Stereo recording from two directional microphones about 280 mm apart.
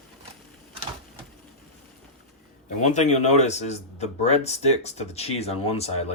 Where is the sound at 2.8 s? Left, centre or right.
Left.